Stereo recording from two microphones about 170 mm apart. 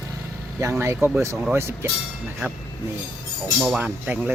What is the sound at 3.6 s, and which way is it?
Speech, 5° right (ahead or behind).